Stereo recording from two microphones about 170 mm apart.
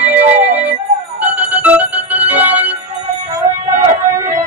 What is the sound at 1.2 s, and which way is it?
Music, 10° right (ahead or behind).